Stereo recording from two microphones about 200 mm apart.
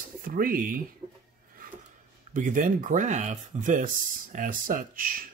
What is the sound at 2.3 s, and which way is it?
Speech, 40° right (ahead or behind).